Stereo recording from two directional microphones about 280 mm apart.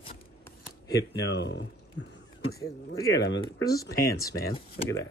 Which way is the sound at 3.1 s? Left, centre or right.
Left.